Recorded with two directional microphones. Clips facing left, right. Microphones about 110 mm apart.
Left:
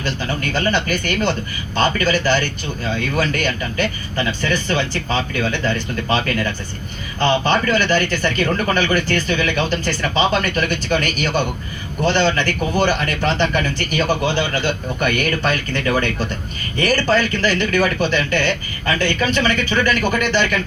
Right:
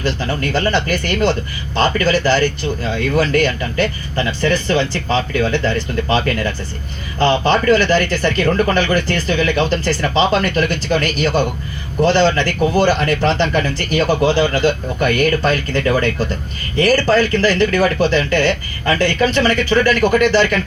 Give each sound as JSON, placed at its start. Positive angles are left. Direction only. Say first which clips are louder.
{"t": 0.5, "sound": "speech", "louder": "right 2 dB", "side_deg": -40}